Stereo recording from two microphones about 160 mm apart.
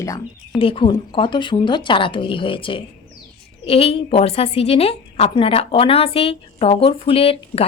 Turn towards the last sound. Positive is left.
turn(degrees=40)  # may be behind; listen again after turning